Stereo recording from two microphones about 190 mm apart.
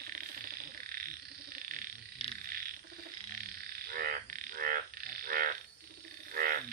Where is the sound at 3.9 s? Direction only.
50° right (ahead or behind).